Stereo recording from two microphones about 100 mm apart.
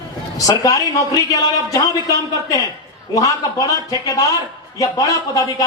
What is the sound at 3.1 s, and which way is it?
A man's voice, 35° left (ahead or behind).